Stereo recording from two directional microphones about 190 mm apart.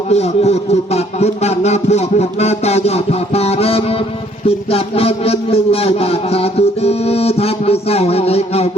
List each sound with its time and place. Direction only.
0.1 s music: 35° left (ahead or behind)